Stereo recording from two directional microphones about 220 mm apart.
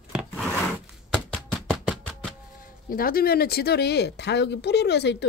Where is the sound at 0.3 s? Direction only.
Centre (ahead or behind).